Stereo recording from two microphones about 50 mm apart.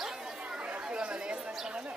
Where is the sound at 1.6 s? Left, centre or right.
Right.